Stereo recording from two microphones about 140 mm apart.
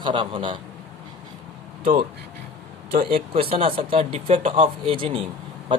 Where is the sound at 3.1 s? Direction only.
40° right (ahead or behind).